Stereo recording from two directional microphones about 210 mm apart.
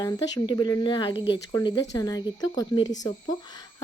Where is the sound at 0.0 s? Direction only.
20° left (ahead or behind).